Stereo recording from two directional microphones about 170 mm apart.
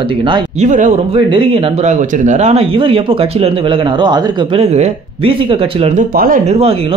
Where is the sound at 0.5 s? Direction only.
45° right (ahead or behind).